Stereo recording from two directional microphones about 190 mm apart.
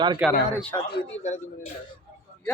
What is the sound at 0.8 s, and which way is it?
Speech, 60° left (ahead or behind).